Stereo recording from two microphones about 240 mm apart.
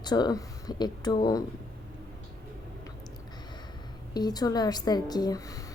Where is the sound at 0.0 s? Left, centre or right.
Centre.